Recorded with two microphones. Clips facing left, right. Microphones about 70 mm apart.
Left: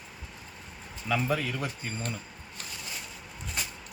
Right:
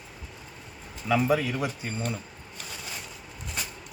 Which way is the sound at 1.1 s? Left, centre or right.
Centre.